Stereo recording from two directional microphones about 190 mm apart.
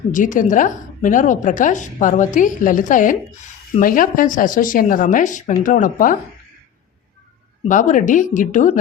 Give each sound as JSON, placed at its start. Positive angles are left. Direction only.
{"t": 0.1, "sound": "a woman's voice", "side_deg": 45}
{"t": 7.7, "sound": "speech", "side_deg": 40}